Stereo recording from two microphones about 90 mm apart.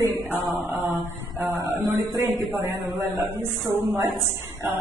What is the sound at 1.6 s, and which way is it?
A man's voice, 20° right (ahead or behind).